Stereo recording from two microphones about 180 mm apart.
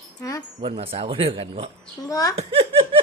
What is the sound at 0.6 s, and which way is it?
Speech, 30° right (ahead or behind).